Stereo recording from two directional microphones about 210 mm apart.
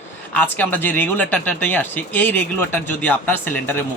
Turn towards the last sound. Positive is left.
turn(degrees=10)  # may be behind; listen again after turning